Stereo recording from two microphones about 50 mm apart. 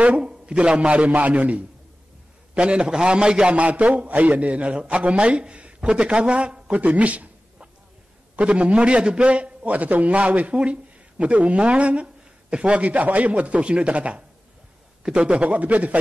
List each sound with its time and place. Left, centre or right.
0.2 s a man's voice: centre
3.5 s a man's voice: right